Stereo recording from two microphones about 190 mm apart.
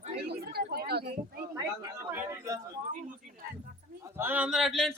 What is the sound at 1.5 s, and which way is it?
Speech, 15° right (ahead or behind).